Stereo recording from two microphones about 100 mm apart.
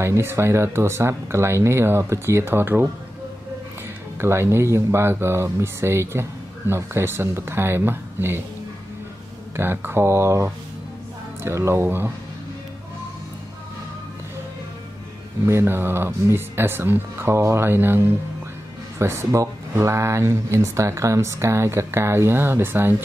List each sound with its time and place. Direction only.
0.0 s speech: 25° right (ahead or behind)
4.2 s speech: 25° right (ahead or behind)
9.6 s speech: 20° right (ahead or behind)
15.4 s speech: 25° right (ahead or behind)